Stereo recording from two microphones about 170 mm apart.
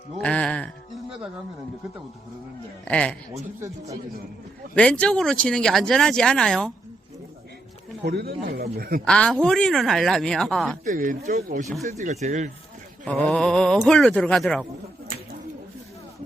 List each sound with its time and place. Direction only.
0.2 s music: 5° left (ahead or behind)
2.8 s speech: 5° left (ahead or behind)
4.7 s speech: 5° left (ahead or behind)
8.0 s speech: 70° right (ahead or behind)
9.0 s speech: 5° left (ahead or behind)
10.8 s speech: 50° right (ahead or behind)
13.1 s speech: 5° left (ahead or behind)